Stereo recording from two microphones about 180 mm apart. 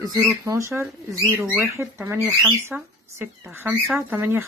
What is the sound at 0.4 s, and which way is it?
Speech, 15° right (ahead or behind).